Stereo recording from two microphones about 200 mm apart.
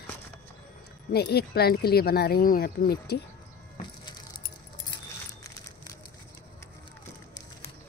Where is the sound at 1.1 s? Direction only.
55° left (ahead or behind).